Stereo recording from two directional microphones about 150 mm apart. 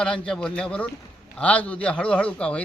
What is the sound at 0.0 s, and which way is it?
A man's voice, 5° left (ahead or behind).